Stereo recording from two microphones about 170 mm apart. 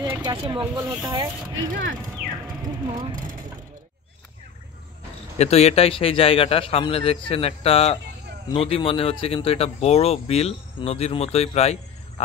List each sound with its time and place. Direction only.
0.2 s speech: 25° right (ahead or behind)
2.9 s speech: 25° right (ahead or behind)
5.4 s speech: 40° left (ahead or behind)